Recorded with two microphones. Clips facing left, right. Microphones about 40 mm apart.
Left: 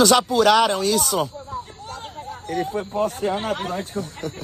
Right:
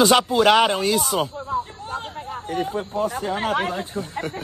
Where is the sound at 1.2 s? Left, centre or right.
Right.